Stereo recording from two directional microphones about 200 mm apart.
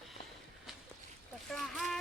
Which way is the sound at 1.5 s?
Centre (ahead or behind).